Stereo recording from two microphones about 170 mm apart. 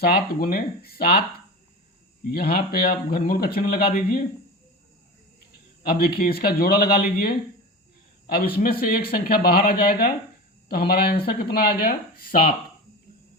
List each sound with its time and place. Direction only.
0.0 s speech: 65° left (ahead or behind)
2.3 s speech: 65° left (ahead or behind)
5.9 s speech: 65° left (ahead or behind)